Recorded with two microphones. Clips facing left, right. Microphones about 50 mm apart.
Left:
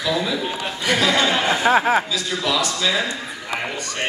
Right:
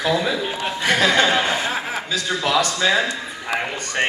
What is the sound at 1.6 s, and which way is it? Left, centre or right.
Speech, left.